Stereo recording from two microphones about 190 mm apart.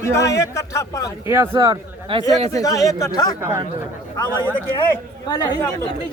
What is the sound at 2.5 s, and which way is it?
Speech, 20° left (ahead or behind).